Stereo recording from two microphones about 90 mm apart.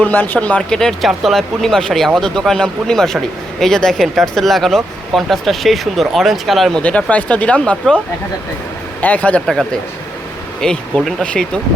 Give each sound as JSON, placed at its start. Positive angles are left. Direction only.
{"t": 0.0, "sound": "speech", "side_deg": 20}
{"t": 6.8, "sound": "speech", "side_deg": 15}
{"t": 9.0, "sound": "speech", "side_deg": 15}
{"t": 10.6, "sound": "speech", "side_deg": 5}